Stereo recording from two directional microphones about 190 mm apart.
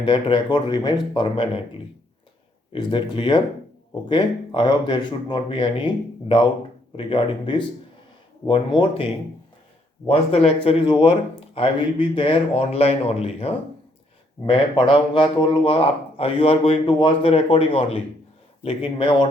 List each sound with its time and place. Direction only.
0.0 s speech: 25° left (ahead or behind)
2.7 s speech: 25° left (ahead or behind)
10.1 s speech: 30° left (ahead or behind)